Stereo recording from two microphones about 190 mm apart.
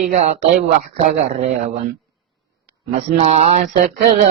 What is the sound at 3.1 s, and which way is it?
Mantra, 35° right (ahead or behind).